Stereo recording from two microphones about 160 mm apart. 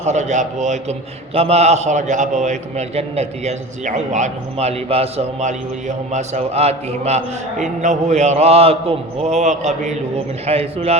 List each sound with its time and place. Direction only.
0.0 s a man's voice: 45° right (ahead or behind)